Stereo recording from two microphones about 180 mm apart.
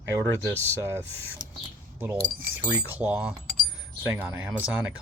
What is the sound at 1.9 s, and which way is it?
Speech, 10° right (ahead or behind).